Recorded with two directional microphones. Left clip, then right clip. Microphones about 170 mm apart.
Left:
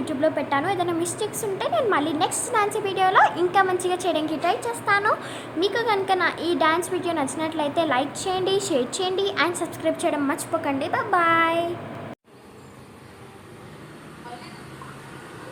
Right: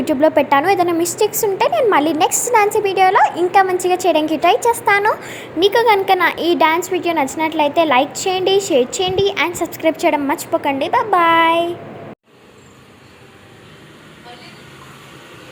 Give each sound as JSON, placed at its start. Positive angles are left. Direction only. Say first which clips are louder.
{"t": 0.2, "sound": "a child's voice", "louder": "right 9 dB", "side_deg": -40}